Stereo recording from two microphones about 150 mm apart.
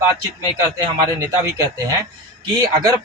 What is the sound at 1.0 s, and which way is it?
Speech, 25° right (ahead or behind).